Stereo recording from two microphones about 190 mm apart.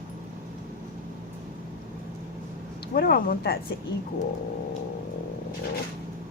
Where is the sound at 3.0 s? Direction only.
50° left (ahead or behind).